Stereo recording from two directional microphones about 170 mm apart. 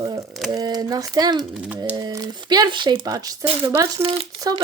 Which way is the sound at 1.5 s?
5° right (ahead or behind).